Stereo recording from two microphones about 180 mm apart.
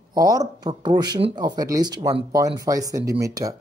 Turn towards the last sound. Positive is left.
turn(degrees=-20)  # may be behind; listen again after turning